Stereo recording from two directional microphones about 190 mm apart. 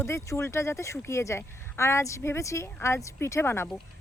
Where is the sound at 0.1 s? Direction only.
15° left (ahead or behind).